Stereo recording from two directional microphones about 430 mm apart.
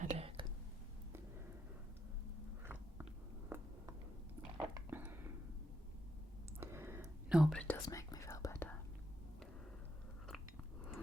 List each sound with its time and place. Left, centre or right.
0.0 s whispering: centre
3.5 s a sound: centre
6.6 s whispering: centre